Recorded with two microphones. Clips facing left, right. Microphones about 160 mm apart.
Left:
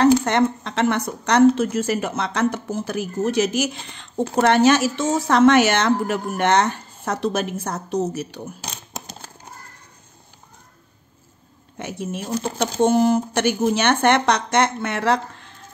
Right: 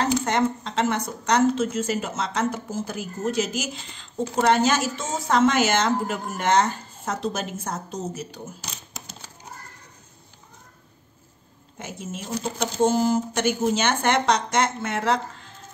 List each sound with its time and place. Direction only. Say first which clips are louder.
0.0 s a woman's voice: left 6 dB; 65° left (ahead or behind)
11.8 s speech: left 6 dB; 65° left (ahead or behind)